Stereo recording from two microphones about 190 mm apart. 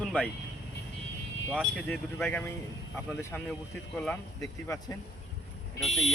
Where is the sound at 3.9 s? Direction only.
10° left (ahead or behind).